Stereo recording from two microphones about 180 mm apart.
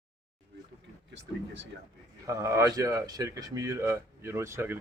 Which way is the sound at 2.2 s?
15° right (ahead or behind).